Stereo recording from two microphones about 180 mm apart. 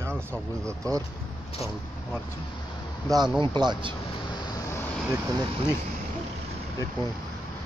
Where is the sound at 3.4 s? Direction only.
25° right (ahead or behind).